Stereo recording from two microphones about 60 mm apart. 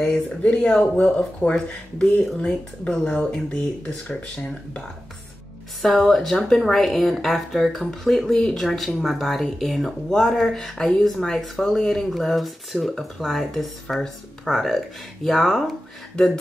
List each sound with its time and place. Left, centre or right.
0.6 s speech: centre
0.9 s speech: left
5.8 s speech: centre